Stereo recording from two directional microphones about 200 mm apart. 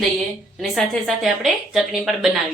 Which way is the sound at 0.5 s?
Centre (ahead or behind).